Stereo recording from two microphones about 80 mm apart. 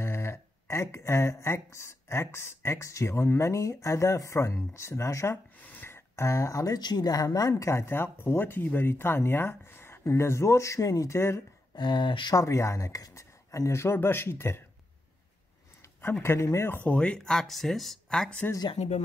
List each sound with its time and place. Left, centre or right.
0.0 s speech: left
5.6 s a sound: left
5.9 s speech: left
6.8 s speech: left
11.7 s speech: left
12.4 s speech: left
16.0 s speech: left
16.7 s speech: centre